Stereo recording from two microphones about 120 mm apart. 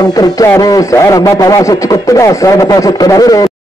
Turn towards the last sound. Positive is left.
turn(degrees=30)  # may be behind; listen again after turning